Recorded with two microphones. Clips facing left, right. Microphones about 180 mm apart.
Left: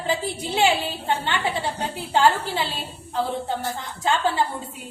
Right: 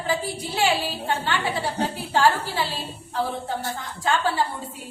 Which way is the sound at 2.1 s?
20° left (ahead or behind).